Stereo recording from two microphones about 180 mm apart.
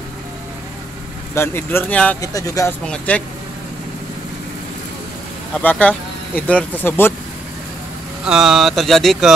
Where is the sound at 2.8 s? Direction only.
5° left (ahead or behind).